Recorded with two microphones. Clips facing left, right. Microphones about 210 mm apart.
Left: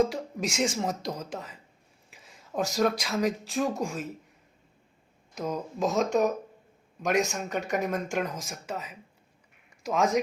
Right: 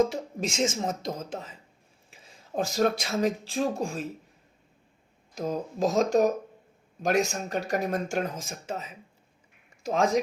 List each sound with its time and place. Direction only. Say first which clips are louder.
0.1 s speech: even; 25° right (ahead or behind)
2.0 s a sound: right 1 dB; 30° right (ahead or behind)
2.9 s speech: right 1 dB; 25° right (ahead or behind)
5.3 s speech: right 2 dB; 35° right (ahead or behind)